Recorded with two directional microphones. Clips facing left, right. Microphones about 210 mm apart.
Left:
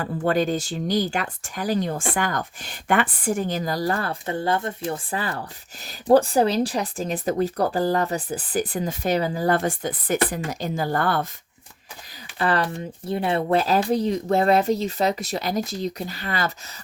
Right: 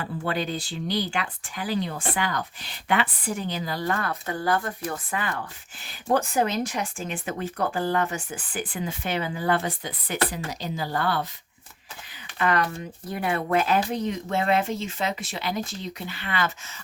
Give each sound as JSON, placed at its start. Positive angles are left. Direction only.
{"t": 0.0, "sound": "speech", "side_deg": 45}
{"t": 12.4, "sound": "speech", "side_deg": 30}